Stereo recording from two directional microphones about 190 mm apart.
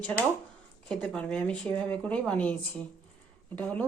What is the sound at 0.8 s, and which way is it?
Speech, 5° left (ahead or behind).